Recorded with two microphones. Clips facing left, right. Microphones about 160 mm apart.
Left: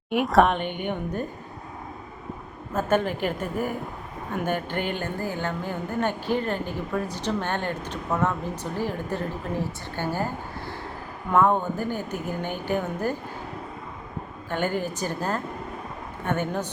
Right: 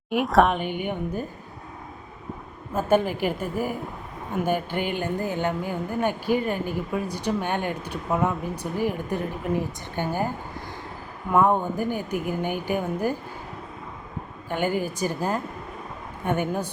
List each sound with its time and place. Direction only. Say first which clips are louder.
0.1 s a woman's voice: even; centre (ahead or behind)
2.7 s a woman's voice: right 2 dB; 10° right (ahead or behind)
11.3 s a woman's voice: even; 15° right (ahead or behind)
14.5 s a woman's voice: right 1 dB; 10° right (ahead or behind)